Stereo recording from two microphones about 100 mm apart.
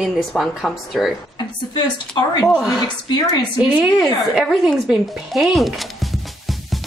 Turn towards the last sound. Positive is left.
turn(degrees=0)  # may be behind; listen again after turning